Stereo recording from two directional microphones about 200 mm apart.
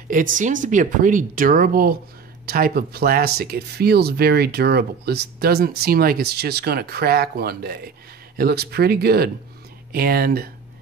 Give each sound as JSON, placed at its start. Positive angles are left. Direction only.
{"t": 0.1, "sound": "speech", "side_deg": -40}